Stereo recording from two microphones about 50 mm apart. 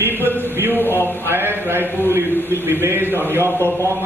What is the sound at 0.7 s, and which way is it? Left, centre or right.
Speech, left.